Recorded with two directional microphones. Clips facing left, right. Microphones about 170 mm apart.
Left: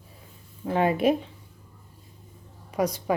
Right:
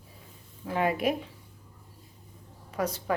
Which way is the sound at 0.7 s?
30° left (ahead or behind).